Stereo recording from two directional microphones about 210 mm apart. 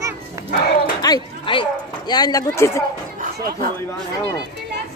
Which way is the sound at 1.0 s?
20° left (ahead or behind).